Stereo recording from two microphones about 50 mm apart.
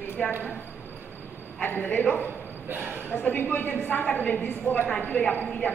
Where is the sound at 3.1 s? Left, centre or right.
Left.